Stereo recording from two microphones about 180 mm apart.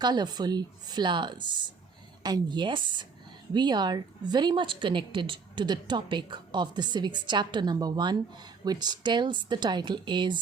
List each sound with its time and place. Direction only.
0.0 s a woman's voice: 25° right (ahead or behind)